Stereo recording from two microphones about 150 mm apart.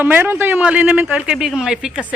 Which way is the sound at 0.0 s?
15° right (ahead or behind).